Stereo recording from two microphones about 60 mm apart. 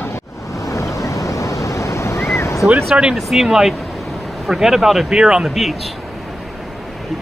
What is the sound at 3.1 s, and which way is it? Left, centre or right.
Speech, centre.